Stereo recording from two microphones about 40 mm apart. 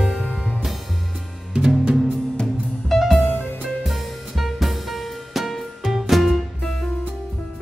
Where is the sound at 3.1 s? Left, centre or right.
Left.